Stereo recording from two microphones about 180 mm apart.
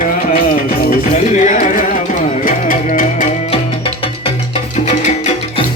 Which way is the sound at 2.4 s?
50° left (ahead or behind).